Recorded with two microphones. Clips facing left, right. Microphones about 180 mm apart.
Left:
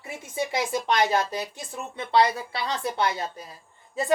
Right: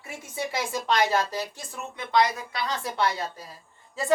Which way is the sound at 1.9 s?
30° left (ahead or behind).